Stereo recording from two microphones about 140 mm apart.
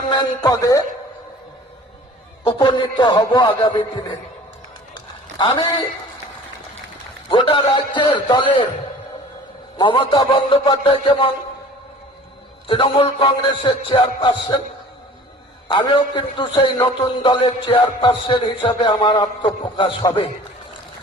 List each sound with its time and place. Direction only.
0.1 s a man's voice: 30° left (ahead or behind)
2.4 s a man's voice: 30° left (ahead or behind)
5.4 s a man's voice: 35° left (ahead or behind)
7.3 s a man's voice: 40° left (ahead or behind)
9.7 s a man's voice: 35° left (ahead or behind)
12.6 s a man's voice: 40° left (ahead or behind)
15.7 s a man's voice: 35° left (ahead or behind)